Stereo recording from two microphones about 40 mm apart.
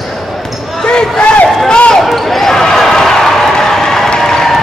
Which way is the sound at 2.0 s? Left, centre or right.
Centre.